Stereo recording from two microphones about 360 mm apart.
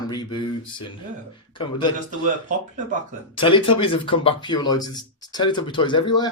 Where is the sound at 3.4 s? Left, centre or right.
Centre.